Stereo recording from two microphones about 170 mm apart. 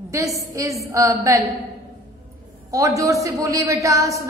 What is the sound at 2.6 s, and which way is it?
A woman's voice, 20° right (ahead or behind).